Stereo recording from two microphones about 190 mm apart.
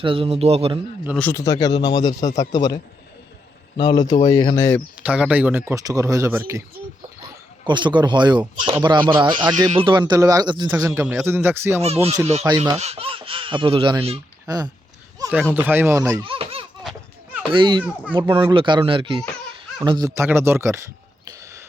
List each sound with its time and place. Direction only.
0.0 s speech: 30° right (ahead or behind)
1.1 s speech: 10° left (ahead or behind)
4.9 s speech: 5° right (ahead or behind)
7.6 s speech: 25° right (ahead or behind)
12.5 s speech: 35° right (ahead or behind)
15.3 s speech: 5° right (ahead or behind)
16.2 s baby laughter: 30° right (ahead or behind)
17.5 s speech: 25° right (ahead or behind)
21.2 s a sound: 15° right (ahead or behind)